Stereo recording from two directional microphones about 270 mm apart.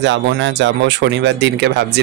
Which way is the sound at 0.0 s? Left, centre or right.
Right.